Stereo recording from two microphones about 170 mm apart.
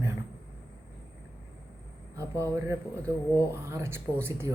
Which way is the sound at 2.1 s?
20° right (ahead or behind).